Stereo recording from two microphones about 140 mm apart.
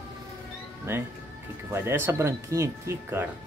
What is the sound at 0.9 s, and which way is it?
Speech, 15° right (ahead or behind).